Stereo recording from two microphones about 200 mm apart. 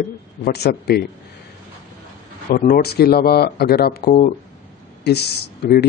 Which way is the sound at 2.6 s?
50° left (ahead or behind).